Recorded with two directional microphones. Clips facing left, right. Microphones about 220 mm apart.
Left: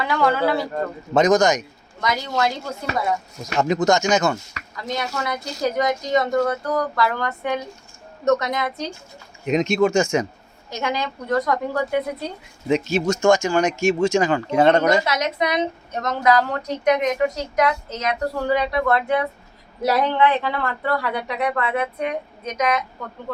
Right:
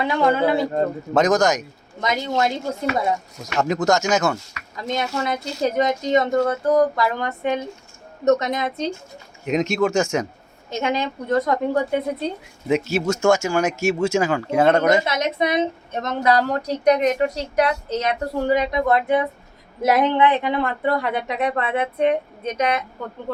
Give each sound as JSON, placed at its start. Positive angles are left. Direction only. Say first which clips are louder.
{"t": 0.0, "sound": "speech", "louder": "right 1 dB", "side_deg": -20}
{"t": 1.1, "sound": "speech", "louder": "left 2 dB", "side_deg": 0}
{"t": 2.0, "sound": "speech", "louder": "right 1 dB", "side_deg": -25}
{"t": 3.4, "sound": "speech", "louder": "left 1 dB", "side_deg": 0}
{"t": 4.7, "sound": "speech", "louder": "right 2 dB", "side_deg": -25}
{"t": 9.5, "sound": "speech", "louder": "left 2 dB", "side_deg": 0}
{"t": 10.7, "sound": "speech", "louder": "right 2 dB", "side_deg": -25}
{"t": 12.6, "sound": "speech", "louder": "even", "side_deg": -5}
{"t": 15.0, "sound": "a woman's voice", "louder": "right 1 dB", "side_deg": -25}
{"t": 18.4, "sound": "speech", "louder": "right 1 dB", "side_deg": -20}